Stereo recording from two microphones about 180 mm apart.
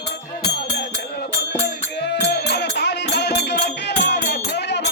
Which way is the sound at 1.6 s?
70° left (ahead or behind).